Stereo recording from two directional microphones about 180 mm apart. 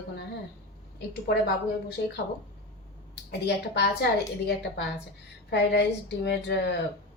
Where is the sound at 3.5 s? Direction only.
65° left (ahead or behind).